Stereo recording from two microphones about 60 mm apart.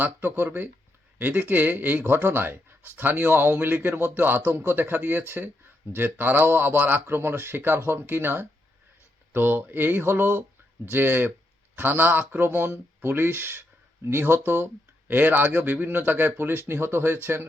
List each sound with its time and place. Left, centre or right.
0.0 s speech: right